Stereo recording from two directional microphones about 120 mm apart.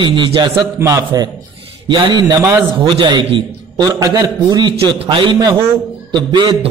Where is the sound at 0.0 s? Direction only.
40° right (ahead or behind).